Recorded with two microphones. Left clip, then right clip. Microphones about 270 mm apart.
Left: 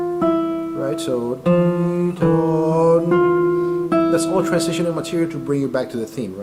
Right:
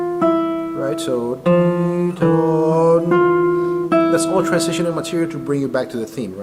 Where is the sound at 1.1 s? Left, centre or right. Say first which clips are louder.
Right 1 dB; centre.